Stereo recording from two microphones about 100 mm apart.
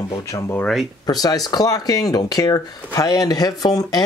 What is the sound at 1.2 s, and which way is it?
Speech, 40° left (ahead or behind).